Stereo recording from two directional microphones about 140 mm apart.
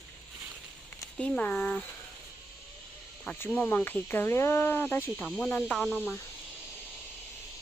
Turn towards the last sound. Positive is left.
turn(degrees=15)  # may be behind; listen again after turning